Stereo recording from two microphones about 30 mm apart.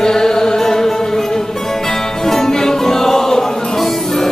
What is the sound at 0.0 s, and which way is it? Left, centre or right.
Music, centre.